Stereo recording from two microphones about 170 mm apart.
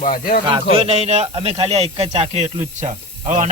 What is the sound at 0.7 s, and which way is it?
Speech, 35° right (ahead or behind).